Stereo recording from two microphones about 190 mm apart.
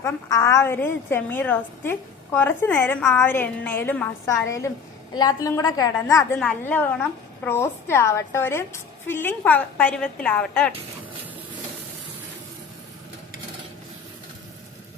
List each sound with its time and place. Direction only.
0.0 s a woman's voice: 15° left (ahead or behind)